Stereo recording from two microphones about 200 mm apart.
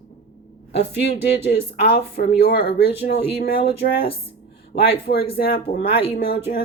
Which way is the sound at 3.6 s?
50° left (ahead or behind).